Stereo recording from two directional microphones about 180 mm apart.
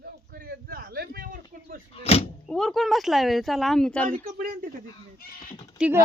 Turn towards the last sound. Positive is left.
turn(degrees=-5)  # may be behind; listen again after turning